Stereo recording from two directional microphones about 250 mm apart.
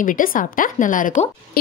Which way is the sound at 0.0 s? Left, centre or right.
Left.